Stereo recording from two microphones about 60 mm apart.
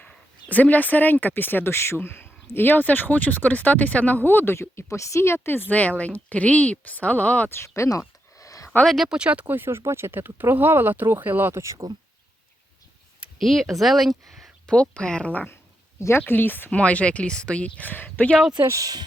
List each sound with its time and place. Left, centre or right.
0.5 s speech: left
7.9 s a sound: left
8.8 s speech: centre
9.0 s speech: centre
9.5 s speech: right
11.6 s speech: right
13.4 s speech: centre
14.7 s speech: centre
16.0 s speech: left
16.2 s speech: left
16.6 s speech: left
18.6 s speech: right